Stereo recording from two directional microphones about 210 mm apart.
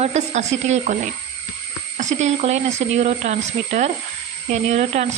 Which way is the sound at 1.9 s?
30° right (ahead or behind).